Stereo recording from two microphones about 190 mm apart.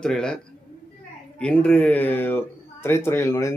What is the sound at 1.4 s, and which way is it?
Speech, 5° left (ahead or behind).